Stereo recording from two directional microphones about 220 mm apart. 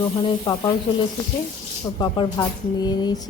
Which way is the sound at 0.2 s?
20° left (ahead or behind).